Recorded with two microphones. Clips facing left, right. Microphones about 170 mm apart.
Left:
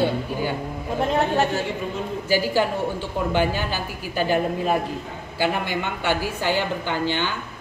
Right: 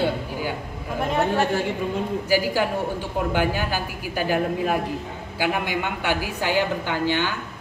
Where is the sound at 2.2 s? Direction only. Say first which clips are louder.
Left 2 dB; 10° right (ahead or behind).